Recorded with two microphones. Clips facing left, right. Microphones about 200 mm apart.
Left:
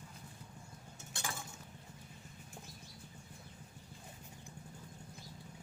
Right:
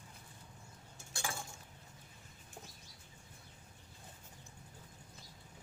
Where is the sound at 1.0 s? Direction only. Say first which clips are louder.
Right 2 dB; 20° left (ahead or behind).